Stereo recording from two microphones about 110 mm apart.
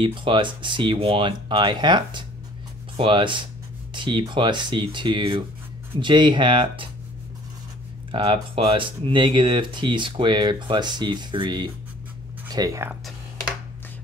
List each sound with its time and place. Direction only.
0.0 s speech: 50° right (ahead or behind)
8.1 s speech: 50° right (ahead or behind)
12.4 s speech: 35° right (ahead or behind)